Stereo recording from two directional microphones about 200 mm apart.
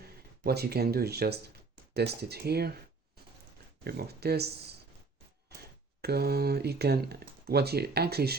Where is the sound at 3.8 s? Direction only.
50° right (ahead or behind).